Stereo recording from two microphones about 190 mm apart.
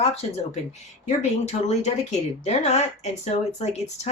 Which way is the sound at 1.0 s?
35° left (ahead or behind).